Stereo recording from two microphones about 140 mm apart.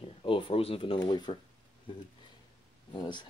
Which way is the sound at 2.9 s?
35° left (ahead or behind).